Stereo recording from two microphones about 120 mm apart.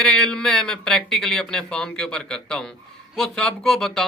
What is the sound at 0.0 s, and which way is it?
Speech, 5° left (ahead or behind).